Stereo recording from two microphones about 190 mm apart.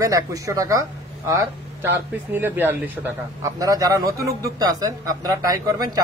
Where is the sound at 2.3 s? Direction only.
10° right (ahead or behind).